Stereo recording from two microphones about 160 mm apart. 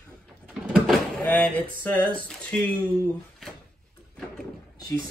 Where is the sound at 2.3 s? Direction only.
5° left (ahead or behind).